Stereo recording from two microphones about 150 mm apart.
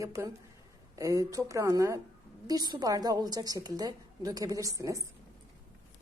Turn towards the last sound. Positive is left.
turn(degrees=-20)  # may be behind; listen again after turning